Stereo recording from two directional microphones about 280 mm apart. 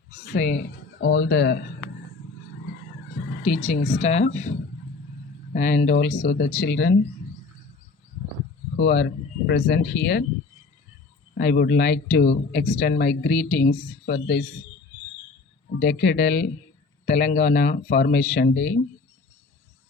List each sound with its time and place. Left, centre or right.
0.2 s a sound: left
0.5 s speech: left
3.4 s speech: left
5.5 s speech: left
6.0 s speech: left
8.7 s speech: left
11.3 s speech: left
15.8 s speech: left
17.1 s speech: left